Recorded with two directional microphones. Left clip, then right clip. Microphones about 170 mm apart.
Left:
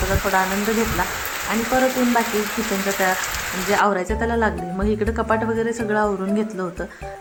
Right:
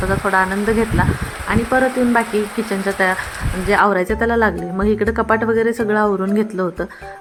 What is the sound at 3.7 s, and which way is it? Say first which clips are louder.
Speech: right 5 dB; 25° right (ahead or behind).